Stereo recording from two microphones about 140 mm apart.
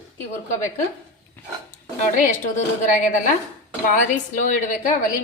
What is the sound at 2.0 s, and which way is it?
A woman's voice, 60° left (ahead or behind).